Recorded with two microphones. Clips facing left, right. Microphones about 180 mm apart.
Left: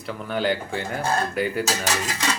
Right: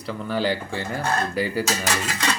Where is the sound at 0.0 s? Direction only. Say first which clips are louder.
Right 1 dB; centre (ahead or behind).